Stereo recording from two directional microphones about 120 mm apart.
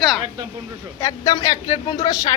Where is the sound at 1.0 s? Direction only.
30° left (ahead or behind).